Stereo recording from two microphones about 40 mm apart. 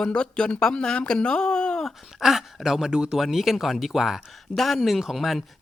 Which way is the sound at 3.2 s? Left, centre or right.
Centre.